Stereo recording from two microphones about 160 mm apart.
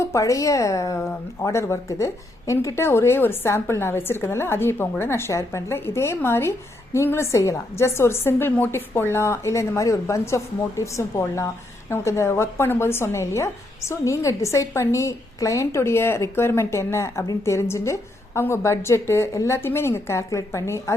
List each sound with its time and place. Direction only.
0.0 s a woman's voice: 20° left (ahead or behind)